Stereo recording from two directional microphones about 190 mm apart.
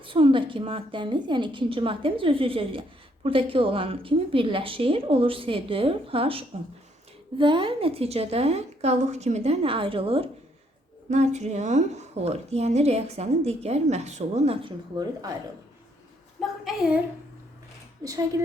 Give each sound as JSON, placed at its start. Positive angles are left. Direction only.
{"t": 0.0, "sound": "a woman's voice", "side_deg": -25}
{"t": 16.4, "sound": "a woman's voice", "side_deg": -5}